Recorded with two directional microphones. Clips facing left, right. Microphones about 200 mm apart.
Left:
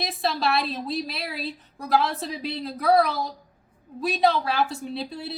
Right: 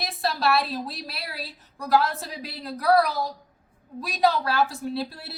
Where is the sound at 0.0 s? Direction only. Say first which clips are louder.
Left 2 dB; centre (ahead or behind).